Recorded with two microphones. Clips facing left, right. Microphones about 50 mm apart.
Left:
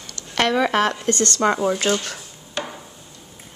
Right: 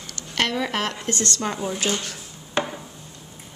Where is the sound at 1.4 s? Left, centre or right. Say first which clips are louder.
Left 8 dB; left.